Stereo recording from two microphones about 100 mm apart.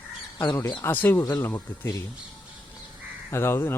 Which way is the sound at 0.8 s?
20° left (ahead or behind).